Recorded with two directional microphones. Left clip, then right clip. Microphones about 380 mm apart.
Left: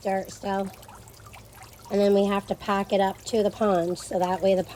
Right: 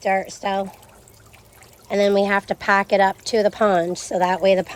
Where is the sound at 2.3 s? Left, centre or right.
Centre.